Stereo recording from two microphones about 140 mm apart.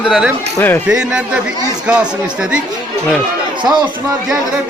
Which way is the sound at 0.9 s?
5° right (ahead or behind).